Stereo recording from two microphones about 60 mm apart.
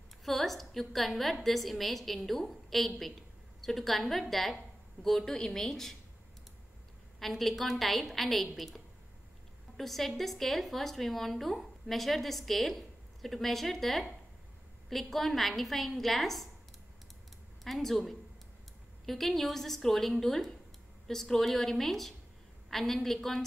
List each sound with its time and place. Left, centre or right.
0.2 s a woman's voice: centre
7.2 s a woman's voice: centre
17.6 s a woman's voice: centre